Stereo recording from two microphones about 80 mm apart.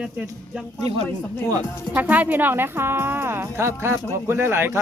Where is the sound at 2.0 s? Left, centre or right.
Right.